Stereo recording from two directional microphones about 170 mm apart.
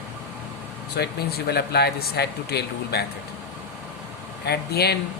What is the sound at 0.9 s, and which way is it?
Speech, 70° left (ahead or behind).